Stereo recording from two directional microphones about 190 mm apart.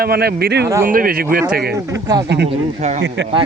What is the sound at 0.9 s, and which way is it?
Speech, 50° right (ahead or behind).